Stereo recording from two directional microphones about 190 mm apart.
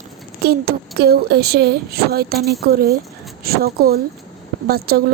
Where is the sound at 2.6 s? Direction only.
55° right (ahead or behind).